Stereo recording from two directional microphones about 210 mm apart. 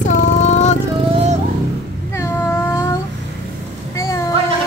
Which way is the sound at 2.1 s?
10° left (ahead or behind).